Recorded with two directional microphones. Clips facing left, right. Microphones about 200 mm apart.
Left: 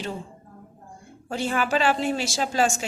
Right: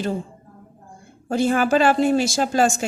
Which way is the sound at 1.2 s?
45° right (ahead or behind).